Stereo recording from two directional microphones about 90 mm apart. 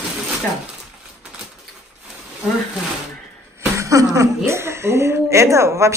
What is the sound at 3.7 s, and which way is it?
A woman's voice, 35° right (ahead or behind).